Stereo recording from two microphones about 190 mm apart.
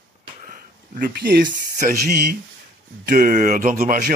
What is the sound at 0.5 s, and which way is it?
Speech, 50° right (ahead or behind).